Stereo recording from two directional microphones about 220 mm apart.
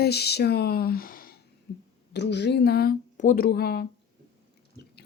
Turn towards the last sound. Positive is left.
turn(degrees=45)  # may be behind; listen again after turning